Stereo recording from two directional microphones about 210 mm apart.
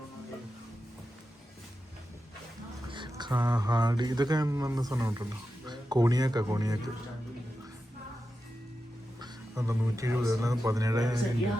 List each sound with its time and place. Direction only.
2.9 s speech: 20° right (ahead or behind)
9.2 s speech: 15° right (ahead or behind)